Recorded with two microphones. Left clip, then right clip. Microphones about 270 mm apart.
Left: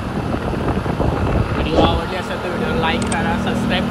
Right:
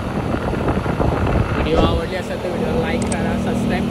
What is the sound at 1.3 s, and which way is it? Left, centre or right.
Vehicle, centre.